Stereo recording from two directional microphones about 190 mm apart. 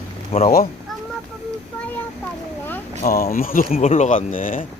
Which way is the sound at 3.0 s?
50° left (ahead or behind).